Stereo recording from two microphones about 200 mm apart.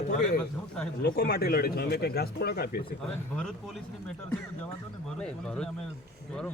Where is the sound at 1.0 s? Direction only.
50° left (ahead or behind).